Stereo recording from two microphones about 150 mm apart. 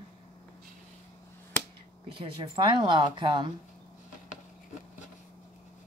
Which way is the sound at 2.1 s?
35° right (ahead or behind).